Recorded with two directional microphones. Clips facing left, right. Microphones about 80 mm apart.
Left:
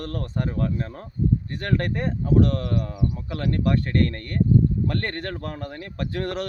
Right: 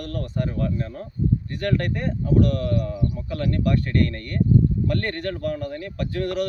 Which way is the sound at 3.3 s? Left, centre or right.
Left.